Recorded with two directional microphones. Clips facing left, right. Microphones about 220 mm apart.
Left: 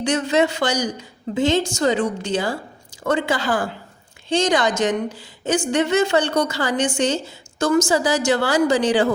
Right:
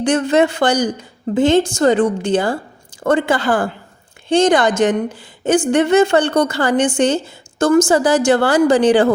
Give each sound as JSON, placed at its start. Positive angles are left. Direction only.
{"t": 0.0, "sound": "a woman's voice", "side_deg": -55}